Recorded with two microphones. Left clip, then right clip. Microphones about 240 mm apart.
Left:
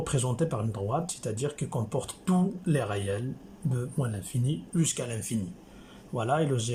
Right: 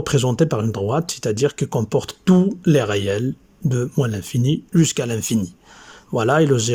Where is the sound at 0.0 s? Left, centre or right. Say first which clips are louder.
Right 11 dB; right.